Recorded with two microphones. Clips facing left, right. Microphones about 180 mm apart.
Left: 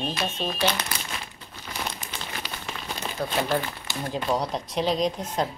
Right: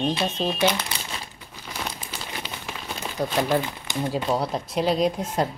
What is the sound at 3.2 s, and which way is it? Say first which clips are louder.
Speech: right 3 dB; 15° right (ahead or behind).